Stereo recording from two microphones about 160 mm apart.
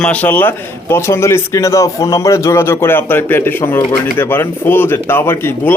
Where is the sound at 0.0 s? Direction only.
10° left (ahead or behind).